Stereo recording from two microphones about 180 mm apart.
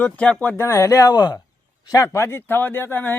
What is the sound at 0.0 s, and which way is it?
A man's voice, 5° left (ahead or behind).